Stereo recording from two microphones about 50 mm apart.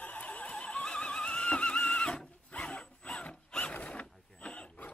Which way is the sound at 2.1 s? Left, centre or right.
Left.